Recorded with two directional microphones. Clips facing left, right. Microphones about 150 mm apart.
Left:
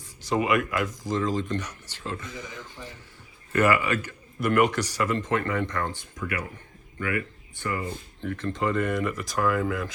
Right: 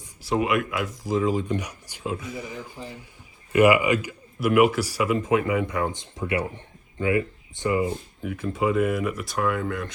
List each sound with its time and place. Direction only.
0.2 s speech: centre (ahead or behind)
6.0 s speech: 25° right (ahead or behind); by 9.9 s centre (ahead or behind)